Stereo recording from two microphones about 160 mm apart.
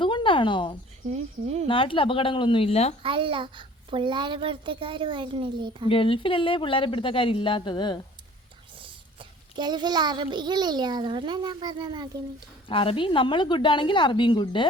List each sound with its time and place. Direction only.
0.0 s a sound: 30° left (ahead or behind)
1.1 s speech: 45° right (ahead or behind)
1.6 s a woman's voice: 30° left (ahead or behind)
3.0 s a child's voice: 35° right (ahead or behind)
5.9 s a woman's voice: 35° left (ahead or behind)
8.8 s a child's voice: 30° right (ahead or behind)
12.6 s a woman's voice: 35° left (ahead or behind)